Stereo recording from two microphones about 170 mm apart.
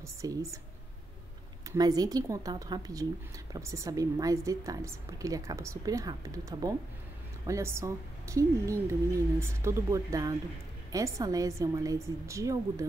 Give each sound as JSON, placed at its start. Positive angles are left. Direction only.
{"t": 0.0, "sound": "speech", "side_deg": -20}
{"t": 1.7, "sound": "a woman's voice", "side_deg": -20}